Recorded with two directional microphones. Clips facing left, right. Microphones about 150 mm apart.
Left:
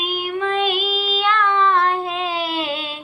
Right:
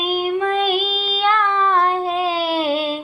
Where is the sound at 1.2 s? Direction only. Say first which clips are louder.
Right 1 dB; 40° right (ahead or behind).